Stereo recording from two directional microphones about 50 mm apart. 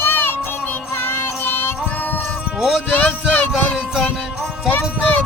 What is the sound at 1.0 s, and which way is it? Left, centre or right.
Music, left.